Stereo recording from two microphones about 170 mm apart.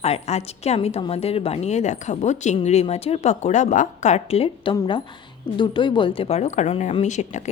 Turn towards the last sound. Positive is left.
turn(degrees=45)  # may be behind; listen again after turning